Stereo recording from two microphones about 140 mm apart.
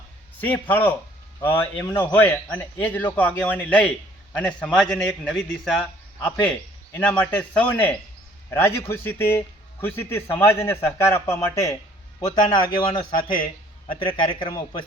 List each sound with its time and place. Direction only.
0.3 s a man's voice: 10° left (ahead or behind); by 14.4 s 40° left (ahead or behind)
14.5 s speech: 30° left (ahead or behind)